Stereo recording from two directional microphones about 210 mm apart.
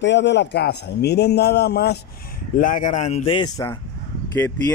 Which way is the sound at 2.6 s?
40° left (ahead or behind).